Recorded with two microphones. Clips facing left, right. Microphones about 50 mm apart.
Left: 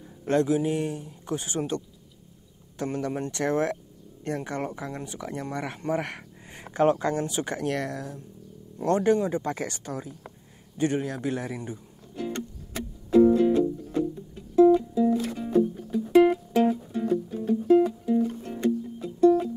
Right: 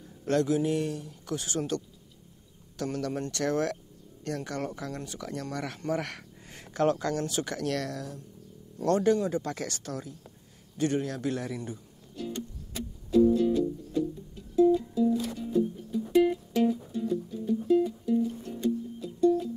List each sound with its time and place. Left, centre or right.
0.2 s speech: left
2.8 s speech: left
12.3 s music: left
13.1 s music: left
18.0 s music: left